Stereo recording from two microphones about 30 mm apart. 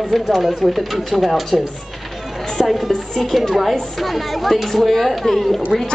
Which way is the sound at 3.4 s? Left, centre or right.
Centre.